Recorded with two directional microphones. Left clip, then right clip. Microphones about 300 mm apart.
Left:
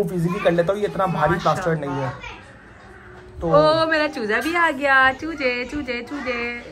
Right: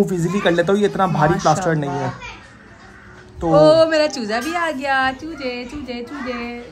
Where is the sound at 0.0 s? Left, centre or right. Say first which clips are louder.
Right 2 dB; right.